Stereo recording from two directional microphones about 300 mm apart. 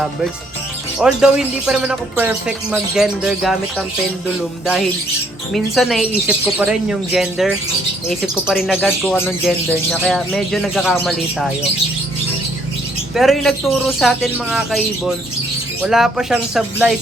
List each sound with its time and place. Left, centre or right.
0.9 s speech: centre
5.5 s speech: centre
13.1 s speech: centre